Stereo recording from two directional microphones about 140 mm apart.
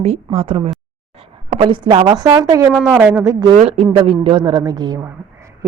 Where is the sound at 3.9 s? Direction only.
40° right (ahead or behind).